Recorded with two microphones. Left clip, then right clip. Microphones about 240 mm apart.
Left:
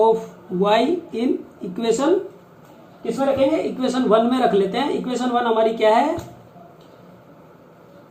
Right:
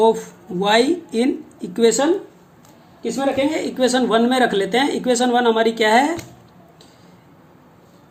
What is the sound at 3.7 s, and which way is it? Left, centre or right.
Speech, right.